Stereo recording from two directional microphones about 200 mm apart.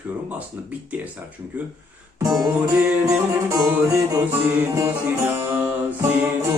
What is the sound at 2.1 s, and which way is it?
Music, 20° right (ahead or behind).